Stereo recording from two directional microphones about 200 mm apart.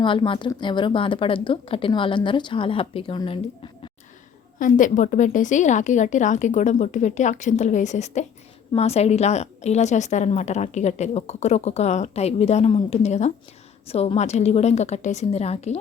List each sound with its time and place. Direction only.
0.0 s a woman's voice: 25° left (ahead or behind)
4.6 s a woman's voice: 40° left (ahead or behind)